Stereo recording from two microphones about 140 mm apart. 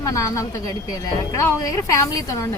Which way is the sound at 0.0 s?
25° left (ahead or behind).